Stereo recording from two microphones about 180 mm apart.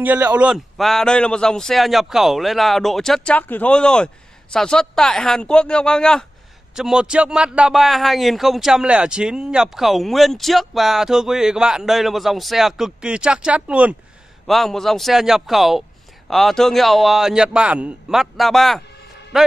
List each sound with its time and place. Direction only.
0.0 s speech: 10° right (ahead or behind)